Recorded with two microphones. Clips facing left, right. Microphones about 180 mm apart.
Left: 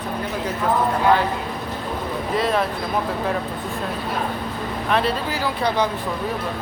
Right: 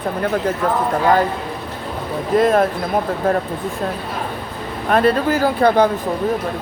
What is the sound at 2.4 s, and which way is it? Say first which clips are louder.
Speech: right 7 dB; 50° right (ahead or behind).